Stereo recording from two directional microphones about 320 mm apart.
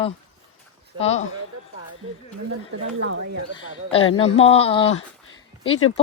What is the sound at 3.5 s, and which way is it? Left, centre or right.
Speech, centre.